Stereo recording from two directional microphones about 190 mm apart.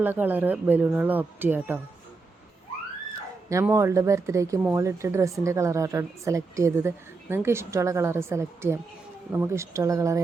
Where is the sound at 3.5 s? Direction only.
15° right (ahead or behind).